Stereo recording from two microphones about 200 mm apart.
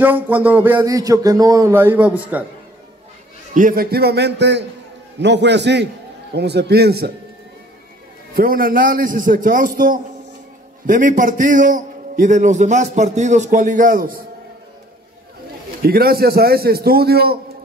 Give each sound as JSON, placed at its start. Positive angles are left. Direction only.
{"t": 0.0, "sound": "speech", "side_deg": -10}
{"t": 3.5, "sound": "a man's voice", "side_deg": -45}
{"t": 8.4, "sound": "a man's voice", "side_deg": -45}
{"t": 15.8, "sound": "a man's voice", "side_deg": -50}